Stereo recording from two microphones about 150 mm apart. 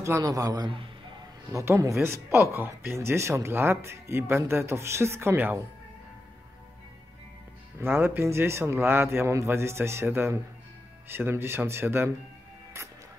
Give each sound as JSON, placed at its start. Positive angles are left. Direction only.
{"t": 0.0, "sound": "a man's voice", "side_deg": -20}
{"t": 1.5, "sound": "speech", "side_deg": -20}
{"t": 7.8, "sound": "speech", "side_deg": -15}
{"t": 12.7, "sound": "music", "side_deg": -20}